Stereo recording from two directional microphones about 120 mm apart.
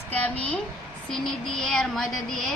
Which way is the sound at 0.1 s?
10° left (ahead or behind).